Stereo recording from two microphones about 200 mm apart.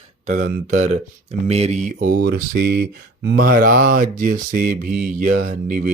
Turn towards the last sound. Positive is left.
turn(degrees=-40)  # may be behind; listen again after turning